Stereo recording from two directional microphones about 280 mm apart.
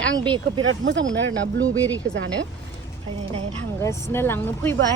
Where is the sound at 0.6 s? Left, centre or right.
Right.